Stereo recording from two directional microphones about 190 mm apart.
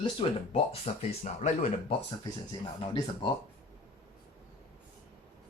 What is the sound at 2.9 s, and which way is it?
Speech, 20° left (ahead or behind).